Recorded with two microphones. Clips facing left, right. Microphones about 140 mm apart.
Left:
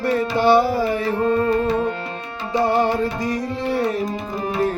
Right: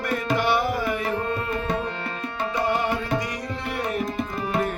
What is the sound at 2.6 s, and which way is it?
Tabla, 35° left (ahead or behind).